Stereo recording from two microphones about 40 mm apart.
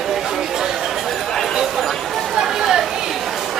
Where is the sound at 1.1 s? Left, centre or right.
Centre.